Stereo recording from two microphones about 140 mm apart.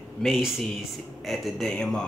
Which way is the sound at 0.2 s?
5° right (ahead or behind).